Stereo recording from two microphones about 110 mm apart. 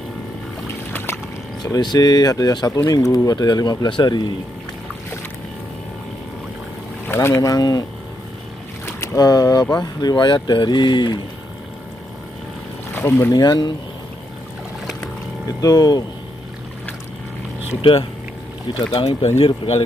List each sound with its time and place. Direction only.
1.6 s speech: 40° left (ahead or behind)
7.1 s speech: 25° left (ahead or behind)
8.8 s boat: 25° left (ahead or behind)
9.2 s speech: 35° left (ahead or behind)
12.9 s speech: 20° left (ahead or behind)
13.3 s speech: 35° left (ahead or behind)
15.4 s speech: 35° left (ahead or behind)
18.9 s speech: 65° left (ahead or behind)